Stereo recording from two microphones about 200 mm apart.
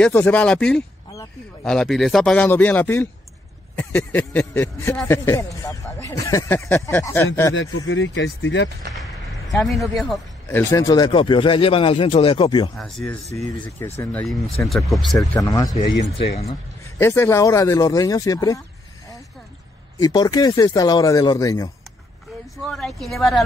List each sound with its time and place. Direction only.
0.0 s a man's voice: 5° left (ahead or behind)
7.7 s speech: 80° left
9.7 s a man's voice: centre (ahead or behind)
10.5 s speech: 15° left (ahead or behind)
12.7 s a man's voice: centre (ahead or behind)
15.4 s speech: 15° left (ahead or behind)
17.0 s speech: 15° left (ahead or behind)
20.0 s speech: 20° left (ahead or behind)
22.6 s a man's voice: centre (ahead or behind)